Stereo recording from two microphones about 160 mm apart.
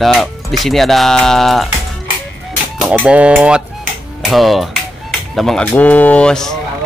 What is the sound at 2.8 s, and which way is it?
Fowl, 5° right (ahead or behind).